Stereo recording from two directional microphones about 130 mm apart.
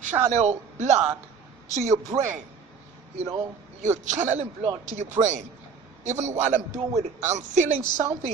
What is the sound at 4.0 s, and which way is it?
A woman's voice, 65° right (ahead or behind).